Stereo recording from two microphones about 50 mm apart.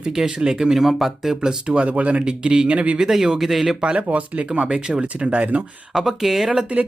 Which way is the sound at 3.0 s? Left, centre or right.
Centre.